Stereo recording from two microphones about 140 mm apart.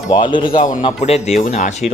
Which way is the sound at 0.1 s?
35° left (ahead or behind).